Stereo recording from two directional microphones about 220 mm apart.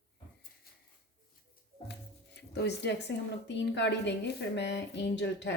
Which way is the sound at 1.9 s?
50° left (ahead or behind).